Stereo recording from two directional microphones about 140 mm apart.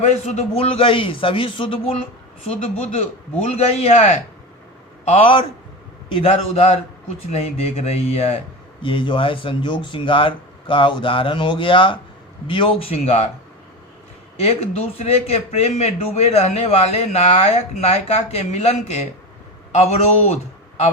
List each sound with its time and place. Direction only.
0.0 s speech: 50° left (ahead or behind)
2.8 s a man's voice: 55° left (ahead or behind)
5.0 s a man's voice: 45° left (ahead or behind)
8.8 s a man's voice: 35° left (ahead or behind)
14.4 s a man's voice: 50° left (ahead or behind)